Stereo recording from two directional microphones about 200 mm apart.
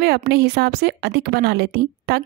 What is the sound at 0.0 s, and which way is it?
A woman's voice, 50° right (ahead or behind).